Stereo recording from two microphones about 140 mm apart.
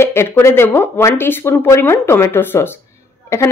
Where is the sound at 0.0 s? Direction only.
20° left (ahead or behind).